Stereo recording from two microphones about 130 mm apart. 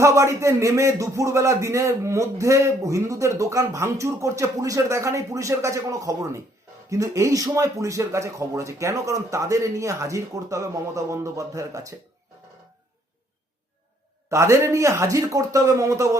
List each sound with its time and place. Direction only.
0.0 s speech: 25° right (ahead or behind)
14.3 s speech: 25° right (ahead or behind)